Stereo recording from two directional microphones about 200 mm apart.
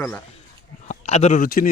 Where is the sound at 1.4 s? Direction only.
45° left (ahead or behind).